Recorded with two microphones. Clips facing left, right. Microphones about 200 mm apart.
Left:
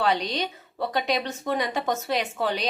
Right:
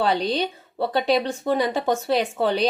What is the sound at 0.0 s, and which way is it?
Speech, 30° right (ahead or behind).